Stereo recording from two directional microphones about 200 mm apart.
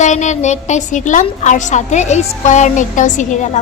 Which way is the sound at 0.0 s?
35° left (ahead or behind).